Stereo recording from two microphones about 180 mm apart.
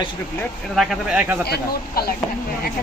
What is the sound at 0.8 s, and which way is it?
Speech, 5° right (ahead or behind).